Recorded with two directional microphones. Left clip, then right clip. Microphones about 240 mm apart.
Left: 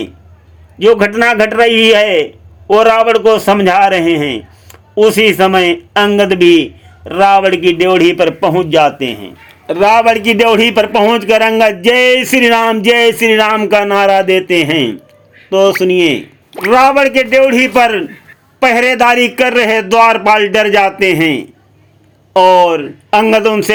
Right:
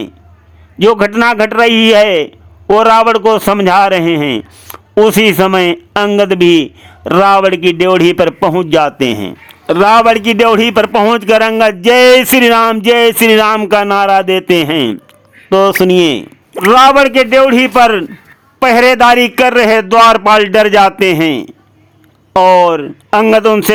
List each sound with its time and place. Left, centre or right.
0.8 s a man's voice: centre
22.4 s a man's voice: right